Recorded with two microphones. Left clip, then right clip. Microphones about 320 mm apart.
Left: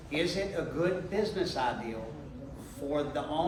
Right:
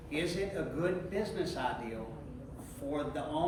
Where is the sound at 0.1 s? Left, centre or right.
Centre.